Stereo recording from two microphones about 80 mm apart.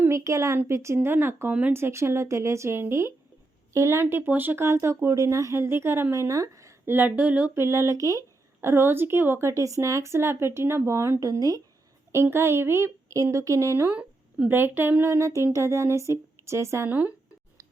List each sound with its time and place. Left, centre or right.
0.1 s a woman's voice: right
4.0 s speech: right
6.9 s speech: right
8.6 s speech: right
12.1 s speech: right
13.9 s speech: centre; by 16.9 s right
16.9 s speech: centre